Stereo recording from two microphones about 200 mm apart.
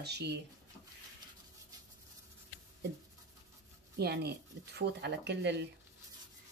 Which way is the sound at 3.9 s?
55° right (ahead or behind).